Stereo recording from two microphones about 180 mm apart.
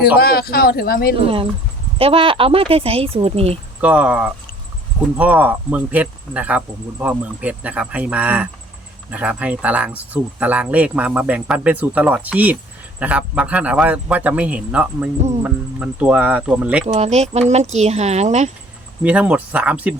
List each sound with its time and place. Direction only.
0.0 s speech: 60° left (ahead or behind)
2.0 s speech: 30° right (ahead or behind)
3.8 s speech: 5° right (ahead or behind)
16.8 s speech: 35° right (ahead or behind)
19.0 s speech: 5° right (ahead or behind)